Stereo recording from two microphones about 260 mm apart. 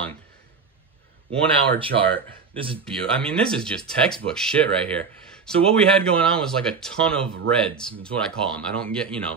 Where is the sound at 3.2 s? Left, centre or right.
Centre.